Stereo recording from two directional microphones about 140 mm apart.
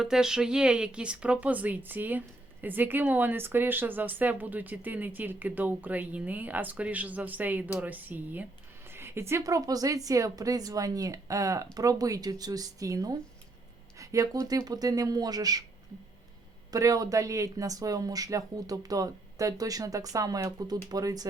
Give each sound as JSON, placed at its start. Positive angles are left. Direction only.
{"t": 0.0, "sound": "a woman's voice", "side_deg": -5}
{"t": 16.7, "sound": "a woman's voice", "side_deg": -25}